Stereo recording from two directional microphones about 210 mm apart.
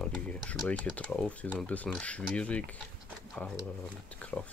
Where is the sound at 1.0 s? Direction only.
5° left (ahead or behind).